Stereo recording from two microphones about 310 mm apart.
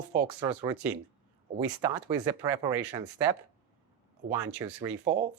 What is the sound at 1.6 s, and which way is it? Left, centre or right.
Speech, centre.